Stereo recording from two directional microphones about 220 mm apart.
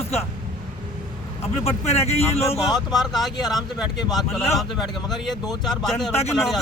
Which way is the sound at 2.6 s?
Centre (ahead or behind).